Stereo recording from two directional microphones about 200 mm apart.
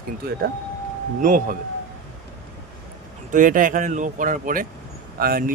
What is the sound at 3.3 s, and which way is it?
Speech, 40° right (ahead or behind).